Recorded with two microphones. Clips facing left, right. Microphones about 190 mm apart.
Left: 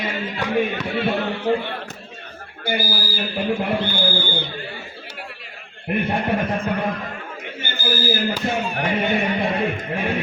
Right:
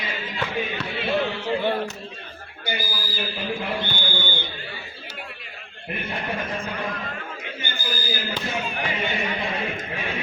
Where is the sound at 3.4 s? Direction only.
55° left (ahead or behind).